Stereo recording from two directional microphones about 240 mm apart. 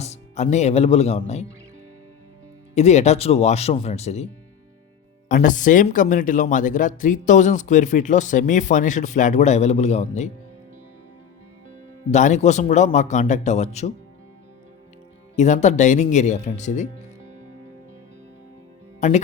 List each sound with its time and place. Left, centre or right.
0.0 s speech: left
2.7 s a man's voice: left
5.3 s speech: left
12.1 s a man's voice: left
15.4 s a man's voice: left
18.9 s speech: left